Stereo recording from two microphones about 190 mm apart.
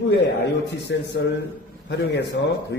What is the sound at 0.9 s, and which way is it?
A man's voice, 65° left (ahead or behind).